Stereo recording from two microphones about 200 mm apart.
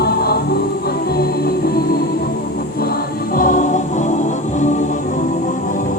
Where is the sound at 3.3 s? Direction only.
40° left (ahead or behind).